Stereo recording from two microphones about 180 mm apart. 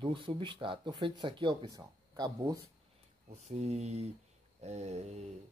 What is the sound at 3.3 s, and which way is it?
Speech, 40° right (ahead or behind).